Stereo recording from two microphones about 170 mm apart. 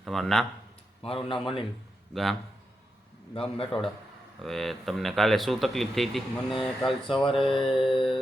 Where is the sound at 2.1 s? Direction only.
Centre (ahead or behind).